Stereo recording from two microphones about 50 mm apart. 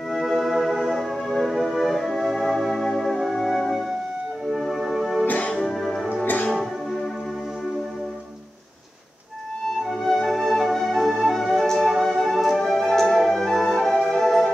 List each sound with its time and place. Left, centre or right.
0.1 s music: centre
5.2 s music: left
5.7 s music: centre
6.2 s music: left
9.8 s music: centre